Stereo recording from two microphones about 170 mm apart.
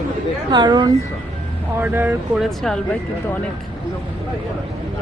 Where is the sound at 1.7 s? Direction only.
10° right (ahead or behind).